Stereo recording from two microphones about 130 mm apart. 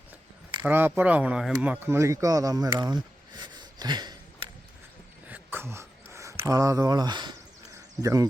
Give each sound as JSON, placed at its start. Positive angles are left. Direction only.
{"t": 0.6, "sound": "speech", "side_deg": -15}
{"t": 5.3, "sound": "a sound", "side_deg": -15}
{"t": 8.0, "sound": "speech", "side_deg": -25}